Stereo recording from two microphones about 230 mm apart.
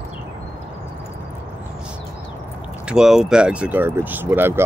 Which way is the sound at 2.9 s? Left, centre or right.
Centre.